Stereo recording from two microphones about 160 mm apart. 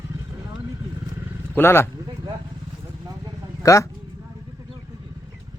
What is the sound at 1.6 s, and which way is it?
Speech, 15° left (ahead or behind).